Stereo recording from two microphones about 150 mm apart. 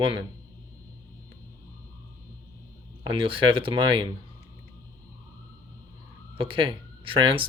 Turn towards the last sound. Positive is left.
turn(degrees=-35)  # may be behind; listen again after turning